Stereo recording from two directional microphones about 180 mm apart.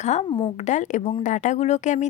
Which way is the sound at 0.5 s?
40° left (ahead or behind).